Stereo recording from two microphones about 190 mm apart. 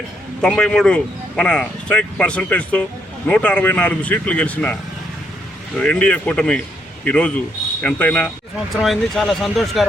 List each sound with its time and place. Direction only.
0.4 s speech: 5° left (ahead or behind)
5.8 s speech: 5° left (ahead or behind)